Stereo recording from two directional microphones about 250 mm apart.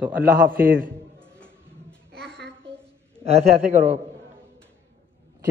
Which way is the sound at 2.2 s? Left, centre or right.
Centre.